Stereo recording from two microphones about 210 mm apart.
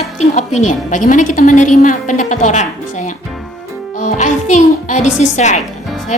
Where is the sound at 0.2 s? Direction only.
35° left (ahead or behind).